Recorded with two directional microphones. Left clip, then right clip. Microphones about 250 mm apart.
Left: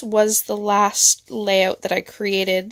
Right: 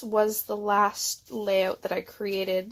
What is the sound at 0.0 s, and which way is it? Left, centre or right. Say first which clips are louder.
Speech: left 7 dB; left.